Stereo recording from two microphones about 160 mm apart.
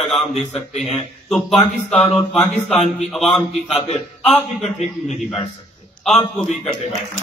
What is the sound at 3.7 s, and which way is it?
A man's voice, 40° left (ahead or behind).